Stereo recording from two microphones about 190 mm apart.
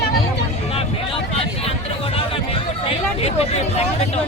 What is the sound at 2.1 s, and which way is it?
Hubbub, 30° left (ahead or behind).